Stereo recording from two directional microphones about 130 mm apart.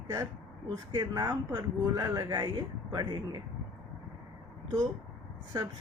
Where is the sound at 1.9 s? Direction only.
25° right (ahead or behind).